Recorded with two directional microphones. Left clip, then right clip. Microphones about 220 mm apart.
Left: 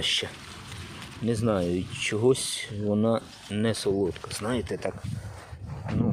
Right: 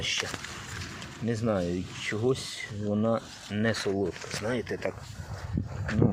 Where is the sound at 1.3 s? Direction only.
25° left (ahead or behind).